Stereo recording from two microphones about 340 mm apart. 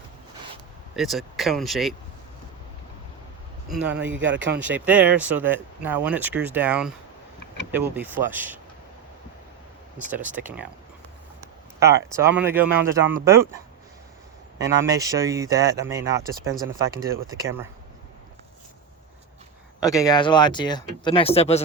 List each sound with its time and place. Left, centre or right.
0.9 s speech: centre
3.7 s speech: centre
10.3 s speech: centre
11.8 s speech: centre
14.6 s speech: right
14.9 s speech: centre
19.8 s speech: centre